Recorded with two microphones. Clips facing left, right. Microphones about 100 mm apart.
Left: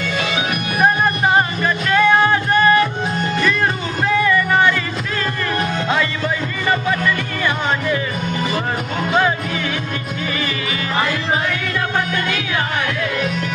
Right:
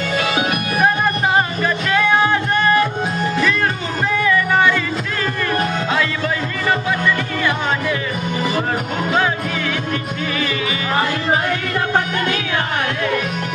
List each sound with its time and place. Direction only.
0.2 s music: 40° right (ahead or behind)
0.8 s music: centre (ahead or behind)
4.1 s music: centre (ahead or behind)
5.9 s music: centre (ahead or behind)